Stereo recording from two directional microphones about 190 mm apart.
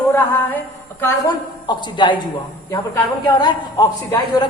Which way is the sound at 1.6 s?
25° left (ahead or behind).